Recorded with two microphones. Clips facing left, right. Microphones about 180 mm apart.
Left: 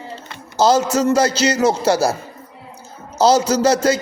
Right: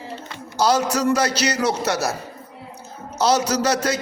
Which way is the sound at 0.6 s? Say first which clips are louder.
Left 4 dB; 25° left (ahead or behind).